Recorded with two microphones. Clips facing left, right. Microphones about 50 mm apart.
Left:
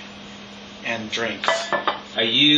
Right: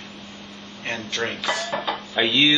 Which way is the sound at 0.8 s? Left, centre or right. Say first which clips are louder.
Left 2 dB; centre.